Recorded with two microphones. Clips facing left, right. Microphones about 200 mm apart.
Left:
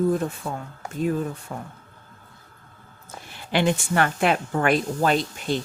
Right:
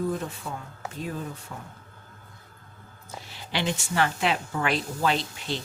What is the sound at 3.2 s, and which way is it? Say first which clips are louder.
Speech: left 7 dB; 50° left (ahead or behind).